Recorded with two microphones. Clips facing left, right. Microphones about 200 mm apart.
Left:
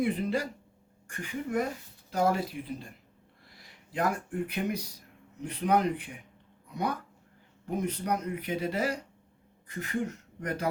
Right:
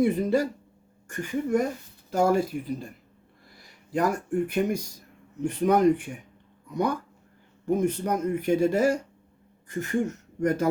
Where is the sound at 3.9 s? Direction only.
45° right (ahead or behind).